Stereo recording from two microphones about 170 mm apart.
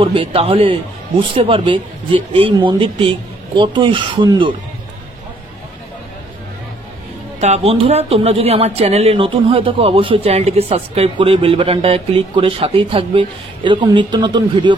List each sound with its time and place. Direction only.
0.0 s speech: 30° right (ahead or behind)
7.3 s a woman's voice: 40° right (ahead or behind)